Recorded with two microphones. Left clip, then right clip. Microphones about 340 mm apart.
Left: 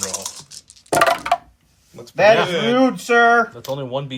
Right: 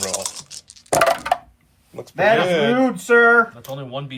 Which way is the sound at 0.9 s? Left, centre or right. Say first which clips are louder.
Left 1 dB; centre.